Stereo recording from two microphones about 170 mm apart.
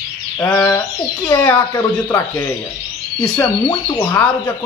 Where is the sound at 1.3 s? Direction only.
20° left (ahead or behind).